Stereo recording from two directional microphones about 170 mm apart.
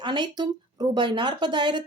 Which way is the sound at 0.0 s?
25° right (ahead or behind).